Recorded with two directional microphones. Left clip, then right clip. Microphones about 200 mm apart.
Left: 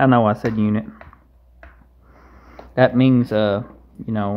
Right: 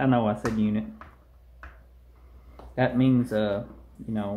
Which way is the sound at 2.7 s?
45° left (ahead or behind).